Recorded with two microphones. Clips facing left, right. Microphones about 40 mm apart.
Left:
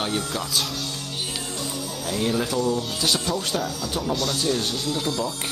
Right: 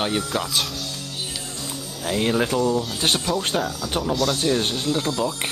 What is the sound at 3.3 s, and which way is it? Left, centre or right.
Speech, centre.